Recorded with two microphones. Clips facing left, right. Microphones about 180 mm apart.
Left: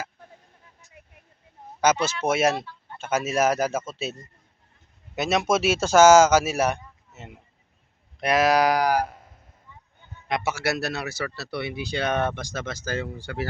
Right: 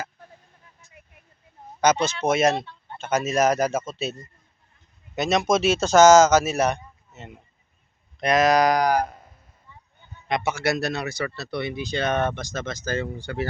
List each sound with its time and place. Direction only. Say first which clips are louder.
1.8 s speech: right 1 dB; 5° left (ahead or behind)
2.6 s chicken: right 2 dB; 25° right (ahead or behind)
3.0 s speech: right 2 dB; 5° left (ahead or behind)
5.1 s speech: right 2 dB; 5° left (ahead or behind)
10.2 s speech: right 2 dB; 5° left (ahead or behind)